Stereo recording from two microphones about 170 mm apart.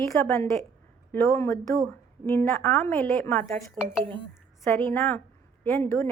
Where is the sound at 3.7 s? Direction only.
5° right (ahead or behind).